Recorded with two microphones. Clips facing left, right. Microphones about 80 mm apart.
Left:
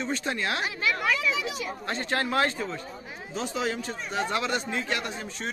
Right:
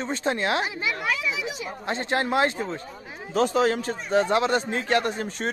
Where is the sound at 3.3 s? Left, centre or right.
Right.